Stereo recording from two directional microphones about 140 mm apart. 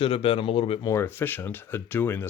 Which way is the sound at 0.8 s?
20° left (ahead or behind).